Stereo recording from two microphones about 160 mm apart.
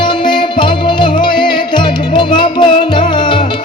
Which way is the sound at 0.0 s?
30° left (ahead or behind).